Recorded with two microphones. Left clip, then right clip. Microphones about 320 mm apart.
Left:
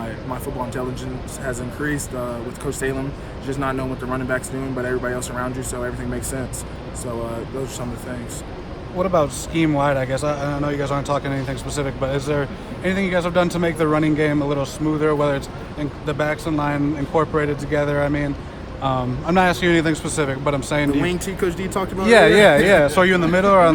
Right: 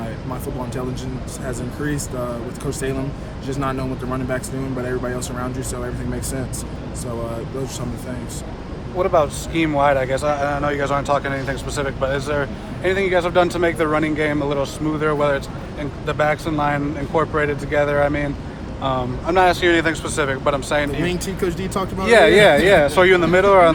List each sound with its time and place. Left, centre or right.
1.5 s speech: centre
3.4 s speech: centre
9.1 s a man's voice: left
21.0 s speech: centre
22.0 s a man's voice: left